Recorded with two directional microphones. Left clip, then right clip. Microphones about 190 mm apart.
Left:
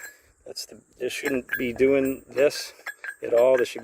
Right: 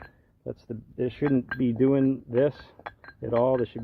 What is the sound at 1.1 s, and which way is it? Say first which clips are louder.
Speech: left 1 dB; 20° left (ahead or behind).